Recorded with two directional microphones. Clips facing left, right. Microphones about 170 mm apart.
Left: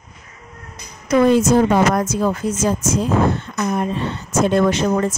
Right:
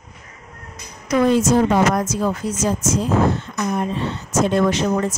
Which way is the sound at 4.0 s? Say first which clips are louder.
Left 1 dB; 55° left (ahead or behind).